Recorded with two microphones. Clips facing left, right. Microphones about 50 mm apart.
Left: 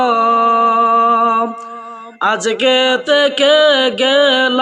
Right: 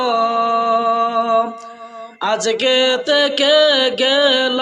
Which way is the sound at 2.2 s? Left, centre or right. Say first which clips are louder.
Left 3 dB; left.